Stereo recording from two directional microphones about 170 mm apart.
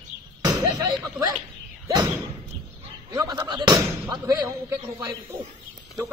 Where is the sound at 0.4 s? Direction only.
20° right (ahead or behind).